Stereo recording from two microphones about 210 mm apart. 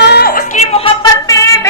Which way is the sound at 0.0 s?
50° left (ahead or behind).